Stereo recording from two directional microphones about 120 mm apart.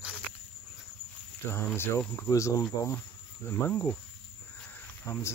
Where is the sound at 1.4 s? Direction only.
20° left (ahead or behind).